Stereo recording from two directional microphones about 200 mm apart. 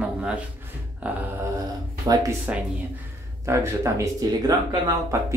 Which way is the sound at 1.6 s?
20° right (ahead or behind).